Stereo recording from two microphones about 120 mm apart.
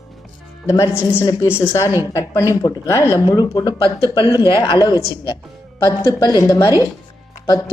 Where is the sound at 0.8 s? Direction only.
20° left (ahead or behind).